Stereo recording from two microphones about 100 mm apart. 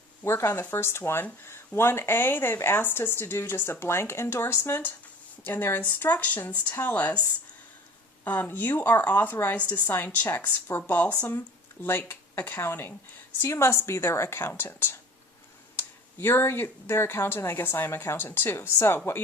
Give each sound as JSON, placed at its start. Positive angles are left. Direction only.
{"t": 0.3, "sound": "speech", "side_deg": 25}
{"t": 8.2, "sound": "speech", "side_deg": 20}